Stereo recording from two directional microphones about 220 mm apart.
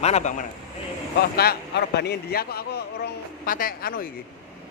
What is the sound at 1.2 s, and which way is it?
A man's voice, 45° left (ahead or behind).